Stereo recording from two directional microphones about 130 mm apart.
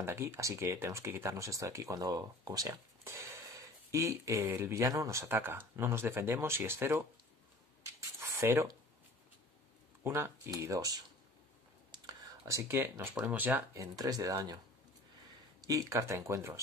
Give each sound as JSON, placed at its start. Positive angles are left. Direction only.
{"t": 0.0, "sound": "speech", "side_deg": -20}
{"t": 8.2, "sound": "a sound", "side_deg": -20}
{"t": 10.0, "sound": "speech", "side_deg": -20}
{"t": 12.4, "sound": "speech", "side_deg": -20}
{"t": 13.7, "sound": "speech", "side_deg": -30}
{"t": 15.6, "sound": "speech", "side_deg": -25}